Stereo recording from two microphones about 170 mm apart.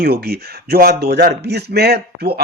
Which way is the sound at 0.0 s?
65° right (ahead or behind).